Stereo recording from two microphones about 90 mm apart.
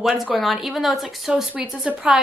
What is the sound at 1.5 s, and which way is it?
Speech, 15° right (ahead or behind).